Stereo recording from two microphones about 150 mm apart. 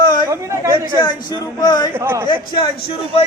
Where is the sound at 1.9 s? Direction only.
15° right (ahead or behind).